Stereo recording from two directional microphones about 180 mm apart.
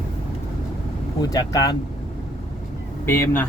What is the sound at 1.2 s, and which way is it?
Speech, 20° left (ahead or behind).